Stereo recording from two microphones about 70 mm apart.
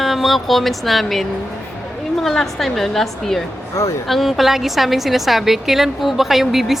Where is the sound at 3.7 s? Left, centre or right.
Left.